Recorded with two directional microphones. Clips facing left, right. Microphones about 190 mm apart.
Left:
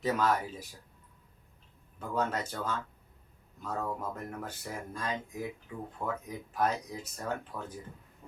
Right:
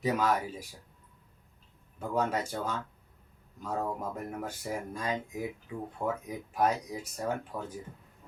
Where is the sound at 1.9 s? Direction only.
10° right (ahead or behind).